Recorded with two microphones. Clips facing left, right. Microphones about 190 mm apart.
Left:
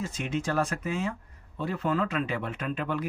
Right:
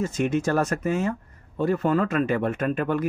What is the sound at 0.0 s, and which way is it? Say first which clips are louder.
Speech: right 8 dB; 45° right (ahead or behind).